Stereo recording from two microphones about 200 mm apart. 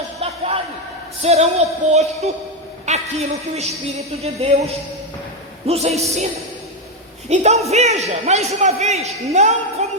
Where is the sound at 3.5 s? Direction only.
30° right (ahead or behind).